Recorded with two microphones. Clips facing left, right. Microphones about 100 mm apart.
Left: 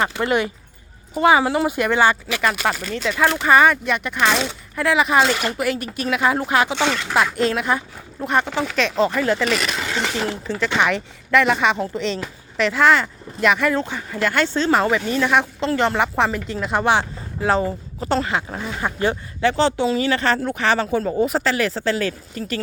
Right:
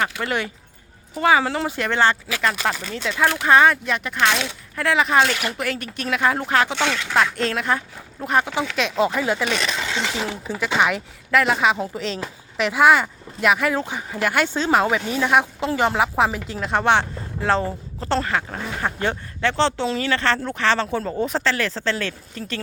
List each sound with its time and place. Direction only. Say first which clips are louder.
0.0 s speech: left 4 dB; 25° left (ahead or behind); by 9.5 s 10° right (ahead or behind)
9.6 s speech: even; 30° right (ahead or behind)
9.9 s a sound: left 2 dB; centre (ahead or behind)
10.4 s speech: even; 10° right (ahead or behind); by 22.6 s 5° left (ahead or behind)